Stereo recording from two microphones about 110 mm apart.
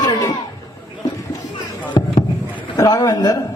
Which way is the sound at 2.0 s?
40° left (ahead or behind).